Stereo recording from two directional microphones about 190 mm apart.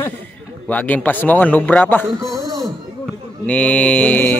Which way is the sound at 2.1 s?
15° right (ahead or behind).